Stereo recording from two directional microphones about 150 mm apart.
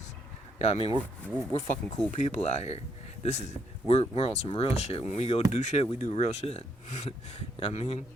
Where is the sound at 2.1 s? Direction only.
50° left (ahead or behind).